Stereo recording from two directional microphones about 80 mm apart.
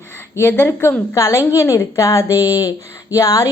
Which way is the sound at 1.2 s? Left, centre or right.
Left.